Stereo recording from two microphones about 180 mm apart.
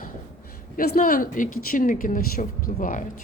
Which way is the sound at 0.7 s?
55° left (ahead or behind).